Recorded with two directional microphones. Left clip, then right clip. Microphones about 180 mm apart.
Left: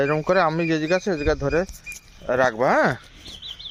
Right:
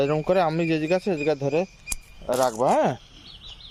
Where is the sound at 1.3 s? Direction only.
10° left (ahead or behind).